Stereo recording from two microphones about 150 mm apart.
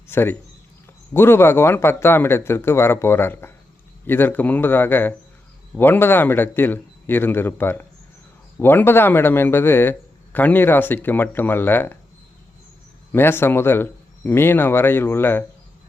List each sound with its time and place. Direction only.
0.1 s speech: 15° left (ahead or behind)
13.1 s speech: 15° left (ahead or behind)